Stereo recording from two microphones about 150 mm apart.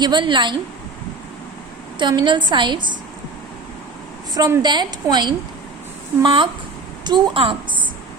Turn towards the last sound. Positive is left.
turn(degrees=-35)  # may be behind; listen again after turning